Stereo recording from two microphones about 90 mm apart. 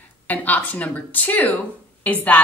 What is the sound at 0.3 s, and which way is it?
A woman's voice, 20° left (ahead or behind).